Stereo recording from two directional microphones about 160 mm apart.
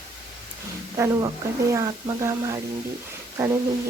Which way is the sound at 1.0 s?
20° right (ahead or behind).